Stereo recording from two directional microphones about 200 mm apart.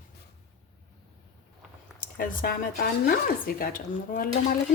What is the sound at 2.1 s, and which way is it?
Speech, 45° left (ahead or behind).